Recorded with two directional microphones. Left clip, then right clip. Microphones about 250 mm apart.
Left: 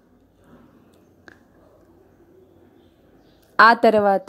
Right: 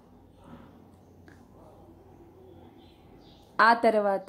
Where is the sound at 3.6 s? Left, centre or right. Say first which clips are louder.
Left 8 dB; left.